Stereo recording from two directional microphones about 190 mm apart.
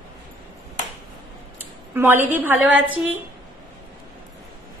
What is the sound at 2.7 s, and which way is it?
Speech, 90° right.